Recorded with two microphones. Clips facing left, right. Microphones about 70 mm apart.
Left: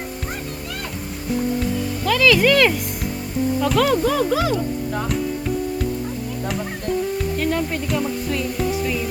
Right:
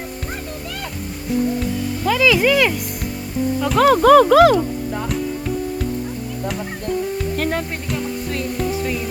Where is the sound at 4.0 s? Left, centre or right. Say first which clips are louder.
Right 10 dB; right.